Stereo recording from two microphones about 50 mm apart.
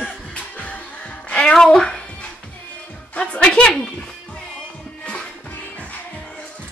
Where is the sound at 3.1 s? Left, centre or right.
Centre.